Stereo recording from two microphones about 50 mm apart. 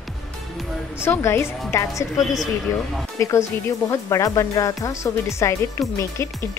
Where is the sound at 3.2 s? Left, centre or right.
Left.